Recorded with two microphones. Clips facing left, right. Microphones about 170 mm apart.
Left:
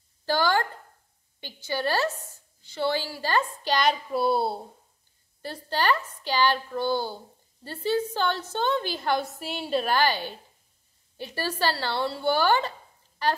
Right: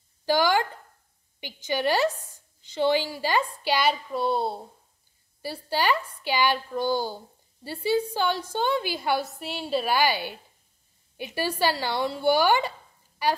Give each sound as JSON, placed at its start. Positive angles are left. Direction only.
{"t": 0.2, "sound": "a sound", "side_deg": -15}
{"t": 1.4, "sound": "a woman's voice", "side_deg": -15}
{"t": 4.1, "sound": "a woman's voice", "side_deg": 5}
{"t": 5.4, "sound": "a woman's voice", "side_deg": -10}